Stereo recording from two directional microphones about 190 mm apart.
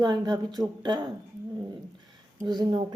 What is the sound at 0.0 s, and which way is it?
Speech, 20° right (ahead or behind).